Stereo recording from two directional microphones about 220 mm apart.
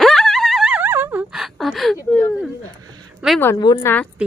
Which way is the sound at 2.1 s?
5° left (ahead or behind).